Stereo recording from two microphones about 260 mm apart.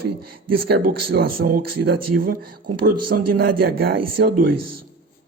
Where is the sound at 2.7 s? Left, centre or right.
Right.